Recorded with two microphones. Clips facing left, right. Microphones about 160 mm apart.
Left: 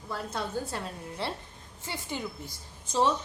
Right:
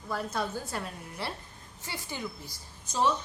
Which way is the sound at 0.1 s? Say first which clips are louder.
Right 1 dB; 25° left (ahead or behind).